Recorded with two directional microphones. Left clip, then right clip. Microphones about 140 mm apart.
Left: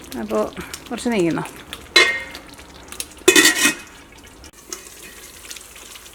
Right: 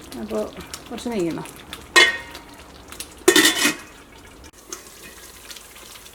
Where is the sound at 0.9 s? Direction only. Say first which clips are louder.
Left 5 dB; 35° left (ahead or behind).